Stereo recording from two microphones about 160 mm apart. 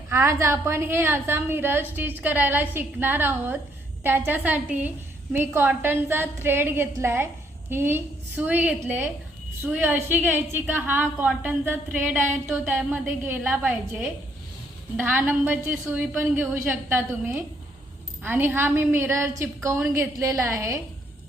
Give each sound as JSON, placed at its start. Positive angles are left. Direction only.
{"t": 0.1, "sound": "a woman's voice", "side_deg": -15}